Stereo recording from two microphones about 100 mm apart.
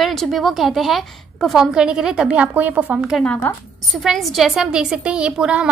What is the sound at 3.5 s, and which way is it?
Speech, 20° left (ahead or behind).